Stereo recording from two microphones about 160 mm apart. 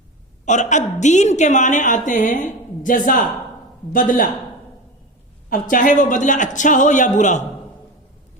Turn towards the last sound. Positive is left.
turn(degrees=50)  # may be behind; listen again after turning